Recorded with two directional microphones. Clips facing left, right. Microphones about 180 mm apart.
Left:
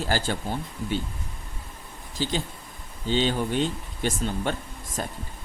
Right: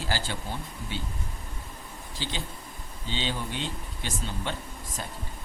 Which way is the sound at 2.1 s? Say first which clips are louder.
Left 8 dB; 45° left (ahead or behind).